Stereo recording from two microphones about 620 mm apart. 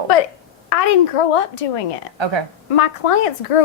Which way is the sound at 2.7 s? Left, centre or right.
Left.